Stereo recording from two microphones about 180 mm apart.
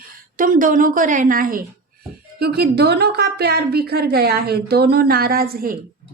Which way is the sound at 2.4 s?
65° right (ahead or behind).